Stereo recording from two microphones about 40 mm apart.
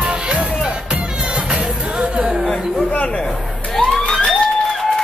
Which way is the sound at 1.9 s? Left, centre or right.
Right.